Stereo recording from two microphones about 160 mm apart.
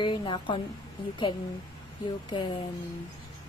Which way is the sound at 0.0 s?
30° left (ahead or behind).